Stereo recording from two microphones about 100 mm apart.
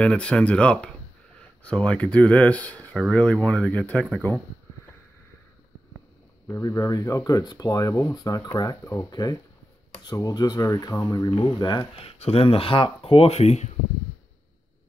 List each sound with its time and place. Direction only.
0.0 s speech: 10° left (ahead or behind)
4.2 s speech: 25° left (ahead or behind)
6.4 s speech: 30° left (ahead or behind)
11.3 s speech: 50° left (ahead or behind)
11.9 s speech: 80° left